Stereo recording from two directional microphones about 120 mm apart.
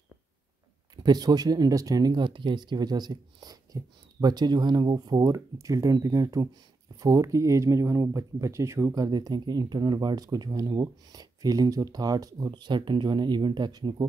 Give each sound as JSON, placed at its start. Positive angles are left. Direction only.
{"t": 0.9, "sound": "speech", "side_deg": -35}